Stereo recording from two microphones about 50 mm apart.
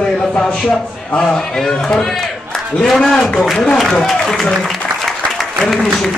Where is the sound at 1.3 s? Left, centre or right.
Centre.